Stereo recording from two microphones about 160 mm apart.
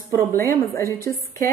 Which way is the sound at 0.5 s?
20° left (ahead or behind).